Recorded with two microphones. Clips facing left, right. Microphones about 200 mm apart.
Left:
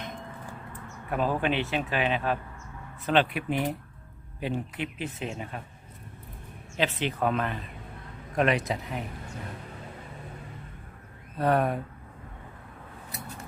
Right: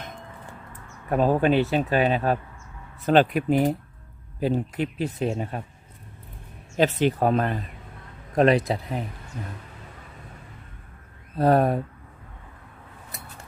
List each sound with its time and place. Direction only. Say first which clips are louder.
1.1 s speech: right 7 dB; 40° right (ahead or behind)
6.7 s speech: right 7 dB; 40° right (ahead or behind)
11.3 s speech: right 5 dB; 35° right (ahead or behind)